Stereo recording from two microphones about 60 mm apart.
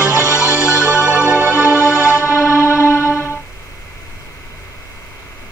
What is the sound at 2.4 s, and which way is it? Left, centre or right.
Music, left.